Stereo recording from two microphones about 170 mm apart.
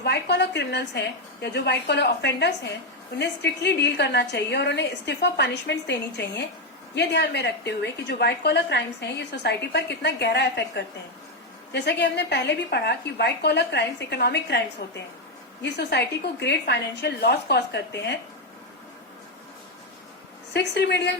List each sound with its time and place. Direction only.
0.0 s a woman's voice: 80° left
20.5 s a woman's voice: 85° left